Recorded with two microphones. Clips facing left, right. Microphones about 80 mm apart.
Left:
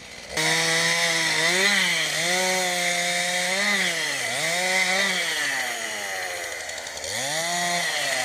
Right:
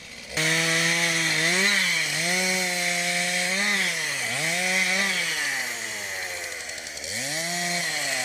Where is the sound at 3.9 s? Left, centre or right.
Left.